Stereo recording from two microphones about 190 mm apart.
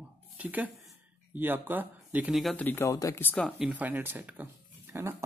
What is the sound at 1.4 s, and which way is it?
Speech, 10° right (ahead or behind).